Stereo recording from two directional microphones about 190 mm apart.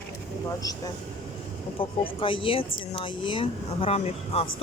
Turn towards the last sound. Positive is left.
turn(degrees=35)  # may be behind; listen again after turning